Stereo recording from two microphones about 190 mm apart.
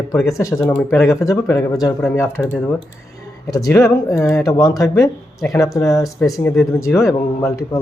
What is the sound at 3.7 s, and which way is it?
Speech, 15° left (ahead or behind).